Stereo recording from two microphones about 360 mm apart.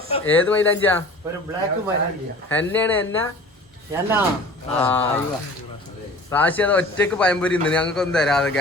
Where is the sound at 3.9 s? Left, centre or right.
Centre.